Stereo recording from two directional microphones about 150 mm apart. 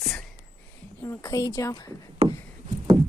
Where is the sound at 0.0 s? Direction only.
Centre (ahead or behind).